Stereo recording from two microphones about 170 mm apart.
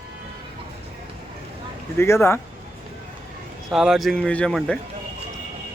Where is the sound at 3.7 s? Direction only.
Centre (ahead or behind).